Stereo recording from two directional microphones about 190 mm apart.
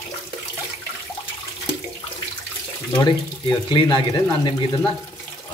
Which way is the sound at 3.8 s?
25° left (ahead or behind).